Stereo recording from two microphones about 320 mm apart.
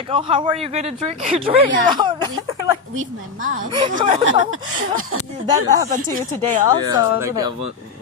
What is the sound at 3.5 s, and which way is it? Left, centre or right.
Speech, centre.